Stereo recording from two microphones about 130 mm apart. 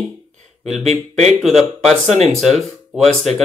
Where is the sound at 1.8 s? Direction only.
Centre (ahead or behind).